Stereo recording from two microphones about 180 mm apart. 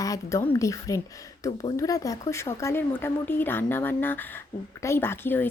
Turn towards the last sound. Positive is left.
turn(degrees=10)  # may be behind; listen again after turning